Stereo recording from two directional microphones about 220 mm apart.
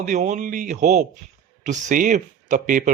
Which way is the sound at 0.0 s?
35° right (ahead or behind).